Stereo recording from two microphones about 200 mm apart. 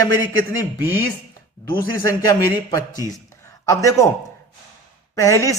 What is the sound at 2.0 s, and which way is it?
A man's voice, 20° left (ahead or behind).